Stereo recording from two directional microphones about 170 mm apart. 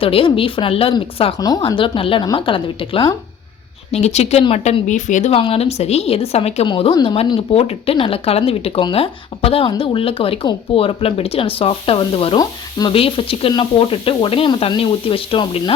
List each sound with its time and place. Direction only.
0.0 s a woman's voice: 30° left (ahead or behind)
5.4 s a woman's voice: 35° left (ahead or behind)